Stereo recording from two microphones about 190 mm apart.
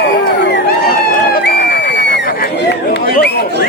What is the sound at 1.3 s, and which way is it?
Crowd, 60° left (ahead or behind).